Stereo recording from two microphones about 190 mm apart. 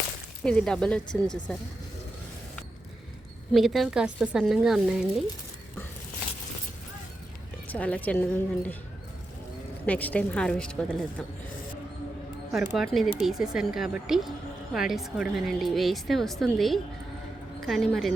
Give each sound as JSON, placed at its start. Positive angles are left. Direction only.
{"t": 0.4, "sound": "speech", "side_deg": 5}
{"t": 3.5, "sound": "speech", "side_deg": 0}
{"t": 7.7, "sound": "a woman's voice", "side_deg": 5}
{"t": 9.8, "sound": "speech", "side_deg": 10}
{"t": 12.7, "sound": "speech", "side_deg": 0}